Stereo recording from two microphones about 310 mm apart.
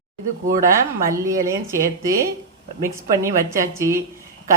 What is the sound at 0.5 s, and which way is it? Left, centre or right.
Speech, right.